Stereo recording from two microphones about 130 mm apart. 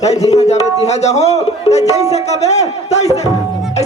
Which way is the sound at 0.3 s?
55° left (ahead or behind).